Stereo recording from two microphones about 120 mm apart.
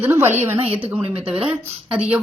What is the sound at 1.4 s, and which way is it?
Speech, 10° right (ahead or behind).